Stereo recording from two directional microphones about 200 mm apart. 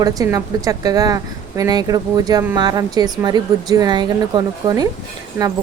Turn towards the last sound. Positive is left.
turn(degrees=-15)  # may be behind; listen again after turning